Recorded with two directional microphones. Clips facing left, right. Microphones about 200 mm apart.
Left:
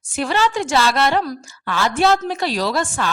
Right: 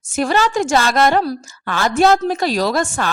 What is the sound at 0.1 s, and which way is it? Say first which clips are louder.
A woman's voice: right 3 dB; 45° right (ahead or behind).